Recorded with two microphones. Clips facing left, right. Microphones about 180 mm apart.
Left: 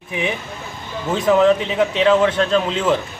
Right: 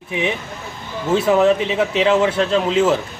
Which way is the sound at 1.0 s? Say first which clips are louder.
Even; 10° right (ahead or behind).